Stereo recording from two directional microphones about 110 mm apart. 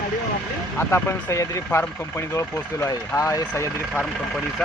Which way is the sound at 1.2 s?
30° left (ahead or behind).